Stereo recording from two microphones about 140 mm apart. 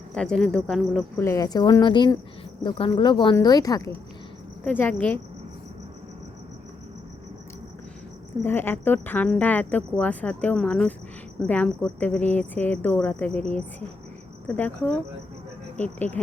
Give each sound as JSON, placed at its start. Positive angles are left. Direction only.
{"t": 0.1, "sound": "speech", "side_deg": 5}
{"t": 1.1, "sound": "speech", "side_deg": 20}
{"t": 4.6, "sound": "speech", "side_deg": 10}
{"t": 8.4, "sound": "speech", "side_deg": 15}
{"t": 14.4, "sound": "speech", "side_deg": 10}